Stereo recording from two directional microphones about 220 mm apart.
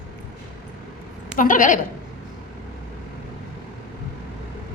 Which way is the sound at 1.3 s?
35° left (ahead or behind).